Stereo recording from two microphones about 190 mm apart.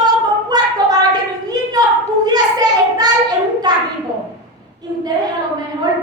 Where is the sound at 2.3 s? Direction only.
20° right (ahead or behind).